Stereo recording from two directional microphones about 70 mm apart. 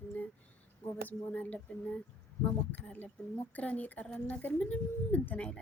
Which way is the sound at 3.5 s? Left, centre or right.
Left.